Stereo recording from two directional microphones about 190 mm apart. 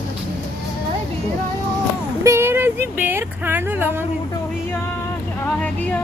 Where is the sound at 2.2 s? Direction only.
15° right (ahead or behind).